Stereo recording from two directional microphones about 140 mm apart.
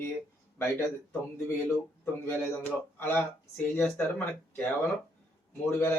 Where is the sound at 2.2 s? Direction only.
15° left (ahead or behind).